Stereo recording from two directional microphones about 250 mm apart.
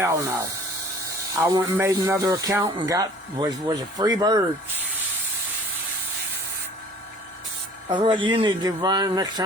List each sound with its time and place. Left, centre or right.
0.0 s speech: centre
7.9 s speech: centre